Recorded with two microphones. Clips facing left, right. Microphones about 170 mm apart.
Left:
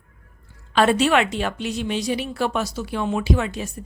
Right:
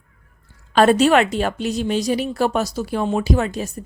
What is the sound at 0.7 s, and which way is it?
Speech, 40° right (ahead or behind).